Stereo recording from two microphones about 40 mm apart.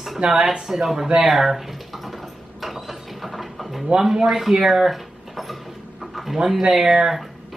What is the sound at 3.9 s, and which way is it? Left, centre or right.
Speech, centre.